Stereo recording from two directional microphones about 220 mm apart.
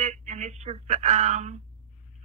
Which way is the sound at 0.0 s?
30° right (ahead or behind).